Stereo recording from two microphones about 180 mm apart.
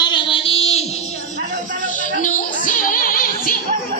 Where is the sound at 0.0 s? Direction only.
25° left (ahead or behind).